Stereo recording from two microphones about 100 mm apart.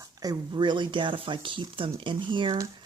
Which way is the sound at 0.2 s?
45° right (ahead or behind).